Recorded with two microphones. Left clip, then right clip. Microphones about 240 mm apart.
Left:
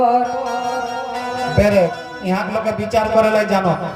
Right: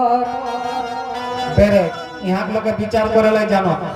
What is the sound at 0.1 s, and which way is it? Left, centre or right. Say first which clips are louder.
Music: left 1 dB; left.